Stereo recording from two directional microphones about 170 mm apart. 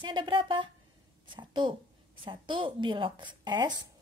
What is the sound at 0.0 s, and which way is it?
A woman's voice, 30° right (ahead or behind).